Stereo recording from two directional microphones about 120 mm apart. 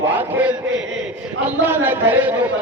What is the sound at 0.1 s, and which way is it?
Chant, 15° right (ahead or behind).